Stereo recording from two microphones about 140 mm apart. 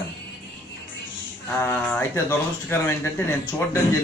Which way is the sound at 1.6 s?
15° left (ahead or behind).